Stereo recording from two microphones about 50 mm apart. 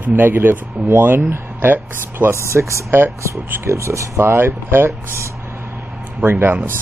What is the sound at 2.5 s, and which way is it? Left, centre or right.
Speech, right.